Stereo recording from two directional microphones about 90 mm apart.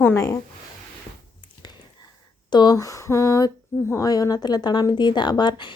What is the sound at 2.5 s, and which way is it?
Speech, 55° left (ahead or behind).